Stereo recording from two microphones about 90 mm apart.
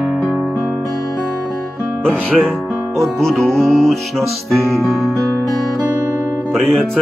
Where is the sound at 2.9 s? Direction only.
Centre (ahead or behind).